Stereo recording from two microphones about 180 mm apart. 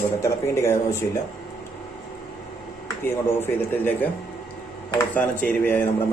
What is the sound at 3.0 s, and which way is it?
A man's voice, 10° left (ahead or behind).